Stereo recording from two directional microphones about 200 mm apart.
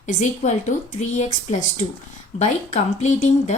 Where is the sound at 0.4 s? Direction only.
35° left (ahead or behind).